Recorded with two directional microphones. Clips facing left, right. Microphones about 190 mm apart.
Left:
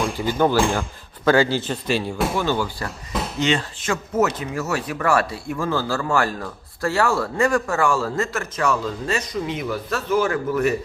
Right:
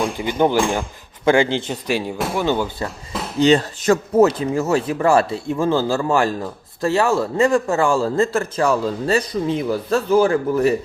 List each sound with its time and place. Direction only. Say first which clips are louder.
0.2 s speech: right 1 dB; 20° right (ahead or behind)